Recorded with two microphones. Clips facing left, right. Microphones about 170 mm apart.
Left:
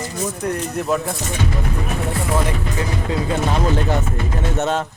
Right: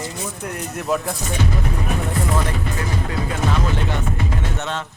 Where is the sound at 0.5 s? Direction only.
Centre (ahead or behind).